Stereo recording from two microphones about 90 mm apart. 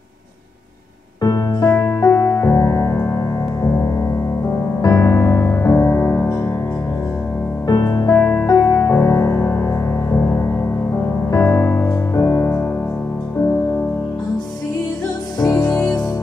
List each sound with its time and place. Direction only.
1.2 s music: 45° left (ahead or behind)
7.6 s music: 50° left (ahead or behind); by 11.9 s 25° left (ahead or behind)
12.2 s music: 35° left (ahead or behind)
15.4 s music: 25° left (ahead or behind)